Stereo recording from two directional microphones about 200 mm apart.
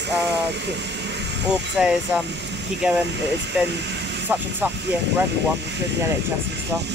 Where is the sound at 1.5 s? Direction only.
5° right (ahead or behind).